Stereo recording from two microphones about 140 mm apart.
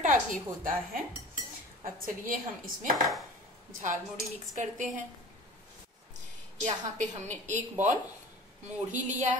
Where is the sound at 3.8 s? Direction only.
60° right (ahead or behind).